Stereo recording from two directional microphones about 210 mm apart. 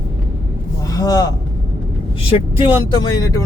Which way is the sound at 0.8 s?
15° left (ahead or behind).